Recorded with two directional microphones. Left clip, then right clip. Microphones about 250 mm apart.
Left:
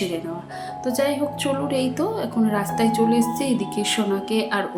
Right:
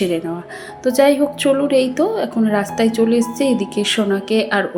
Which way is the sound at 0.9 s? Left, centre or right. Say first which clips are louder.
Right 9 dB; centre.